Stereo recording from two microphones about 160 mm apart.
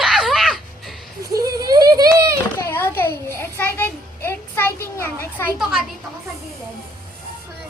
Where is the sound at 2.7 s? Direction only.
15° left (ahead or behind).